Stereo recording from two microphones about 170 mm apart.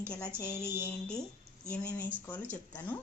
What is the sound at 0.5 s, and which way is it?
Mantra, 15° right (ahead or behind).